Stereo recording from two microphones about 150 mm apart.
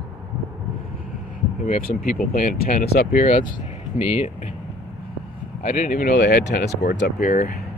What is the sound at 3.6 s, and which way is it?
Speech, 45° left (ahead or behind).